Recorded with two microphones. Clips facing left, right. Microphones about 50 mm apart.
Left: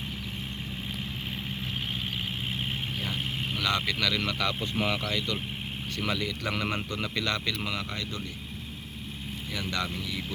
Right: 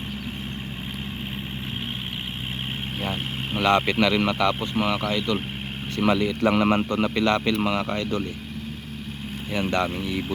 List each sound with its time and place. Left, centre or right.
3.0 s speech: right
4.4 s speech: centre
6.0 s a man's voice: right
7.5 s a man's voice: right
9.5 s speech: right